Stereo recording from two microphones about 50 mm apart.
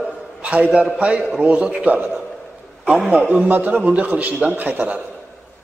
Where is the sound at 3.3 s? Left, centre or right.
Right.